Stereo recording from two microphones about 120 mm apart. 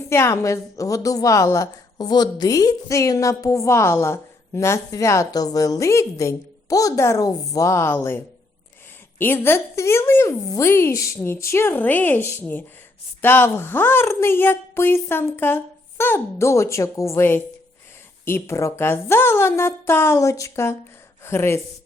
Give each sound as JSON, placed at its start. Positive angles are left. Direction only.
{"t": 0.1, "sound": "a woman's voice", "side_deg": 20}